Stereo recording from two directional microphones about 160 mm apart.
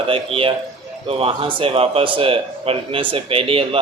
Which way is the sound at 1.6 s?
35° right (ahead or behind).